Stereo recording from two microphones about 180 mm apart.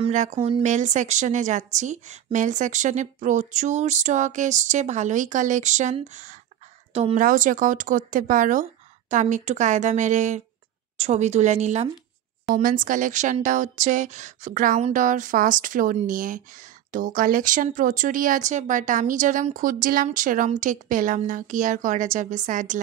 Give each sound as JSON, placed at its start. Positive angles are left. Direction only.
{"t": 0.0, "sound": "a woman's voice", "side_deg": -40}
{"t": 7.2, "sound": "a woman's voice", "side_deg": -50}